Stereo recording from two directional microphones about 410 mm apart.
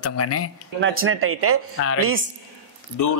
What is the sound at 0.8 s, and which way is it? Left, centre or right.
Speech, right.